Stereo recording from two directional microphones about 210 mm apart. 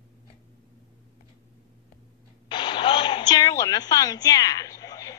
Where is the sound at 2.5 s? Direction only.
25° left (ahead or behind).